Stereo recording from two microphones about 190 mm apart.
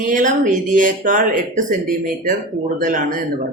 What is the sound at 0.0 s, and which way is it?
Speech, 45° right (ahead or behind).